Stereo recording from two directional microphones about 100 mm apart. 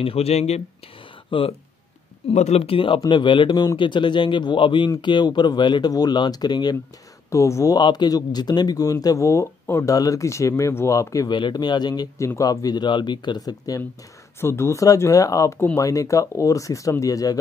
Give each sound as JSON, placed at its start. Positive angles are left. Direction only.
{"t": 0.0, "sound": "speech", "side_deg": 85}
{"t": 1.3, "sound": "speech", "side_deg": 55}
{"t": 2.2, "sound": "a man's voice", "side_deg": 70}
{"t": 7.2, "sound": "speech", "side_deg": 30}
{"t": 7.7, "sound": "speech", "side_deg": 45}
{"t": 11.2, "sound": "a man's voice", "side_deg": 50}
{"t": 14.4, "sound": "speech", "side_deg": 25}